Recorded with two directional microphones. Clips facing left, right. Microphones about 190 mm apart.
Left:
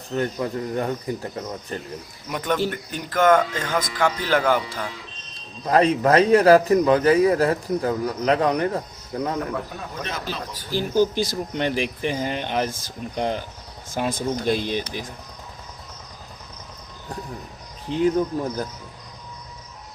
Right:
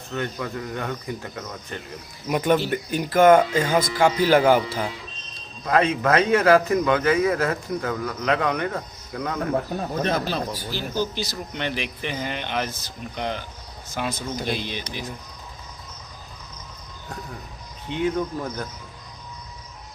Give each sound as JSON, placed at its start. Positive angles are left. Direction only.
{"t": 0.1, "sound": "a man's voice", "side_deg": 35}
{"t": 2.3, "sound": "speech", "side_deg": -10}
{"t": 5.6, "sound": "a man's voice", "side_deg": 35}
{"t": 9.5, "sound": "speech", "side_deg": -40}
{"t": 10.7, "sound": "a man's voice", "side_deg": 50}
{"t": 17.8, "sound": "a man's voice", "side_deg": 35}